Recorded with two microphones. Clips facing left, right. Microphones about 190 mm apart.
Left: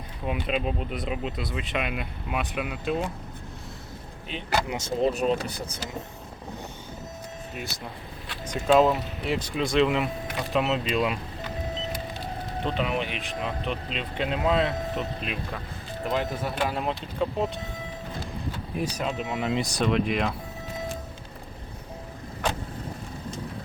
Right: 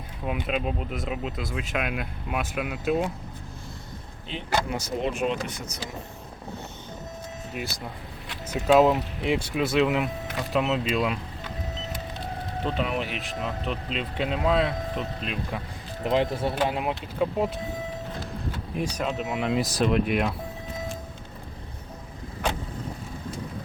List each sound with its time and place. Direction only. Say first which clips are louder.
0.4 s speech: left 1 dB; centre (ahead or behind)
4.3 s speech: even; 15° left (ahead or behind)
5.1 s speech: left 2 dB; 40° left (ahead or behind)
8.4 s speech: right 1 dB; 5° right (ahead or behind)
12.6 s speech: even; centre (ahead or behind)
16.0 s speech: right 4 dB; 25° right (ahead or behind)
16.9 s speech: right 2 dB; 5° right (ahead or behind)
18.8 s speech: right 1 dB; 5° left (ahead or behind)